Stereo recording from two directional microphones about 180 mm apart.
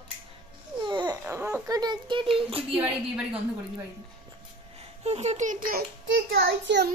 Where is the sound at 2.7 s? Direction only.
5° right (ahead or behind).